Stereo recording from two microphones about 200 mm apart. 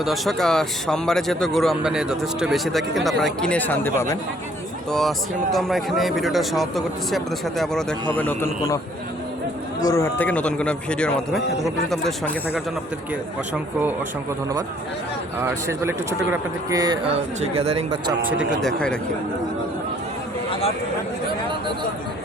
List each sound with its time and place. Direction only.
0.0 s a man's voice: centre (ahead or behind)
4.9 s a man's voice: centre (ahead or behind)
9.8 s a man's voice: 15° left (ahead or behind)
15.4 s speech: 10° right (ahead or behind)
17.4 s speech: 30° right (ahead or behind)
18.3 s a man's voice: centre (ahead or behind)
20.5 s a sound: 30° left (ahead or behind)